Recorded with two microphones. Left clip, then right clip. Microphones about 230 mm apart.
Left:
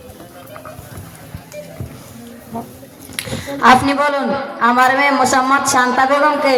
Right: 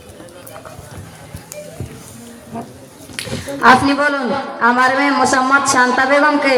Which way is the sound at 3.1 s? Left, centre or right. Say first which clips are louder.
Even; centre.